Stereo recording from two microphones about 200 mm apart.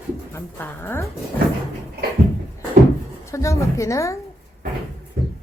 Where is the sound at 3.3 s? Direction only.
15° left (ahead or behind).